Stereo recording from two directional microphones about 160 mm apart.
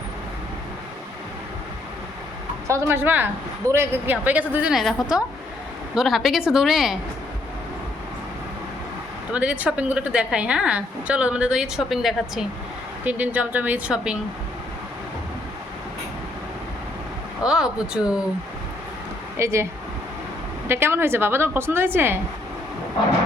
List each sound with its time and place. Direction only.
2.6 s a woman's voice: 20° right (ahead or behind)
9.3 s a woman's voice: 10° right (ahead or behind)
17.4 s a woman's voice: 5° right (ahead or behind)
19.4 s a woman's voice: 20° right (ahead or behind)
20.7 s a woman's voice: 15° right (ahead or behind)